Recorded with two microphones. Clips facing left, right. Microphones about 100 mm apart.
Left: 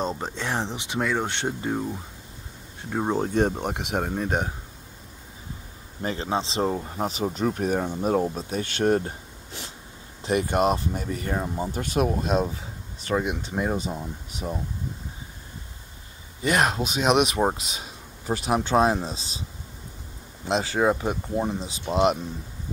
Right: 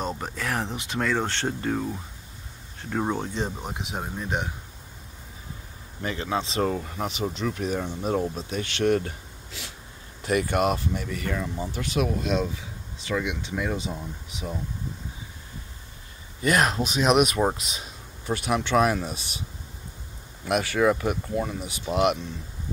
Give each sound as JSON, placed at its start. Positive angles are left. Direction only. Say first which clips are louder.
{"t": 0.2, "sound": "speech", "louder": "left 1 dB", "side_deg": 25}
{"t": 3.3, "sound": "speech", "louder": "left 7 dB", "side_deg": 55}
{"t": 3.6, "sound": "speech", "louder": "left 6 dB", "side_deg": 65}
{"t": 6.0, "sound": "speech", "louder": "left 1 dB", "side_deg": 30}
{"t": 7.3, "sound": "speech", "louder": "left 3 dB", "side_deg": 45}
{"t": 16.4, "sound": "speech", "louder": "even", "side_deg": 30}
{"t": 20.4, "sound": "speech", "louder": "even", "side_deg": 25}